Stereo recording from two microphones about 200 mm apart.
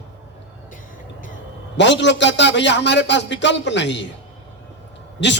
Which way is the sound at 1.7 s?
60° left (ahead or behind).